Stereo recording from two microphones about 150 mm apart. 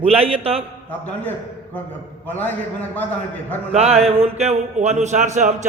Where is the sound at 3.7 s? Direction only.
45° right (ahead or behind).